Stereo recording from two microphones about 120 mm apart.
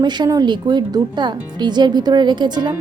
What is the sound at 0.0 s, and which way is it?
Speech, 35° right (ahead or behind).